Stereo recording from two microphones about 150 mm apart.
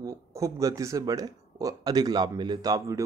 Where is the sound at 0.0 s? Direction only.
20° right (ahead or behind).